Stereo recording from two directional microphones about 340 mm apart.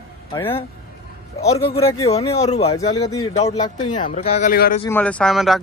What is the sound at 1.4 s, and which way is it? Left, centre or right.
Speech, centre.